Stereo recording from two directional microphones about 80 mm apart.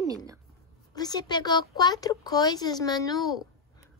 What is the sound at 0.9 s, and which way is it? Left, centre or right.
Speech, left.